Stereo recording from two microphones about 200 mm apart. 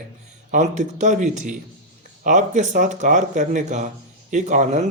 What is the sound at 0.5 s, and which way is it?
Speech, 35° right (ahead or behind).